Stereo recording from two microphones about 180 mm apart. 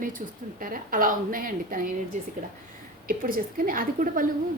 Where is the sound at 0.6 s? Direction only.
50° right (ahead or behind).